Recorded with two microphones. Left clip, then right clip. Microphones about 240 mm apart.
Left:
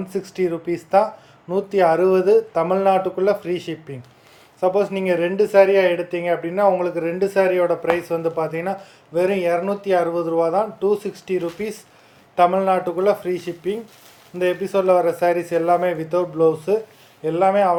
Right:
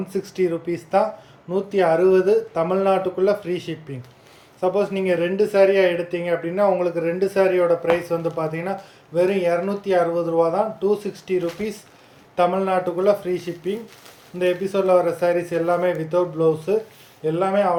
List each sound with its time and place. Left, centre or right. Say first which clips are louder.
0.1 s speech: even; centre